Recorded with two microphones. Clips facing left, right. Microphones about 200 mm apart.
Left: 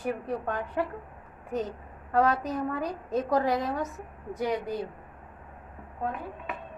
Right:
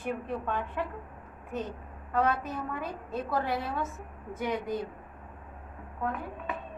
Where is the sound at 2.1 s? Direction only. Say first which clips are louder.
Left 3 dB; 40° left (ahead or behind).